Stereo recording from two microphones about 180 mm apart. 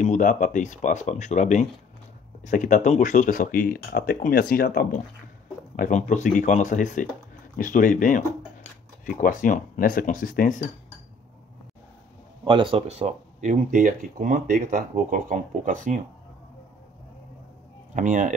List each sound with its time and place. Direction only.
0.0 s speech: 45° left (ahead or behind)
5.8 s speech: 45° left (ahead or behind)
12.4 s speech: 30° right (ahead or behind); by 16.0 s 45° right (ahead or behind)
17.9 s speech: 45° right (ahead or behind)